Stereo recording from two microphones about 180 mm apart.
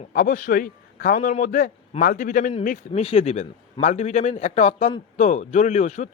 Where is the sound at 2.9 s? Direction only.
30° left (ahead or behind).